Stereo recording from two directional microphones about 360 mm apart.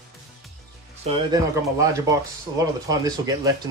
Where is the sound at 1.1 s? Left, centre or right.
Centre.